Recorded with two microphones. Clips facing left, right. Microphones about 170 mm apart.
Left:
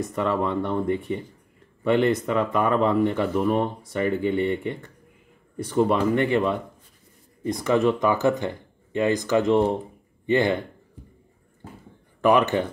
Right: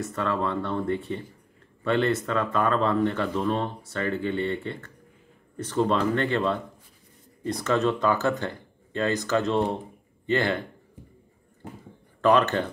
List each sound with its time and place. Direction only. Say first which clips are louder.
0.0 s speech: left 3 dB; 15° left (ahead or behind)
12.2 s speech: left 2 dB; 15° left (ahead or behind)